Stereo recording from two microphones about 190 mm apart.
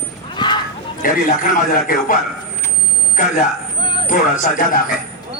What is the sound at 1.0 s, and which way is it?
A man's voice, 45° left (ahead or behind).